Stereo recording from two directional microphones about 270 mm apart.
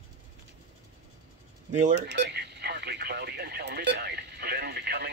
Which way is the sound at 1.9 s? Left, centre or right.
Right.